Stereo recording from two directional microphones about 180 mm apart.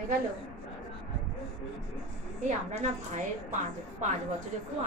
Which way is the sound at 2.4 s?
40° right (ahead or behind).